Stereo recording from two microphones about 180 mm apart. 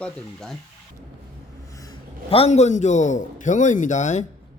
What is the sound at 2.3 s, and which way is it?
A man's voice, 35° left (ahead or behind).